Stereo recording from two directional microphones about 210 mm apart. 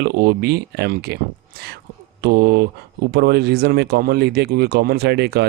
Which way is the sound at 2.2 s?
50° right (ahead or behind).